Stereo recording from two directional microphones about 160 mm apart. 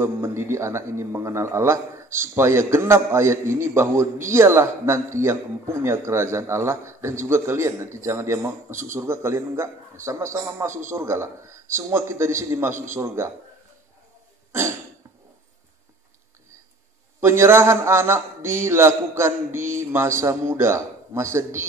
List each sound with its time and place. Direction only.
0.0 s a man's voice: 15° right (ahead or behind)
14.5 s a sound: 15° right (ahead or behind)
17.2 s a man's voice: 15° right (ahead or behind)